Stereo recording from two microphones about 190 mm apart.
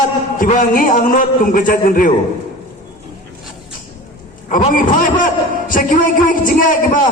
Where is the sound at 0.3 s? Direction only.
45° left (ahead or behind).